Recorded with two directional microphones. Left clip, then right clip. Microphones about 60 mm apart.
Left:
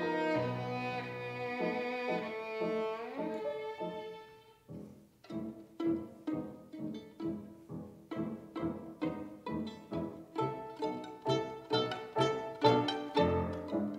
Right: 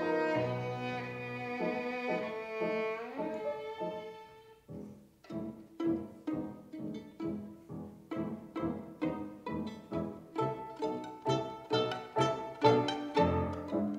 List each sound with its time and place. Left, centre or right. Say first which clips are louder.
0.0 s music: right 2 dB; left
5.3 s pizzicato: right 1 dB; centre
8.1 s music: right 1 dB; centre